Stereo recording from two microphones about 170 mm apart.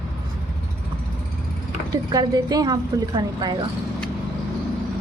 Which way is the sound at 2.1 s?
25° right (ahead or behind).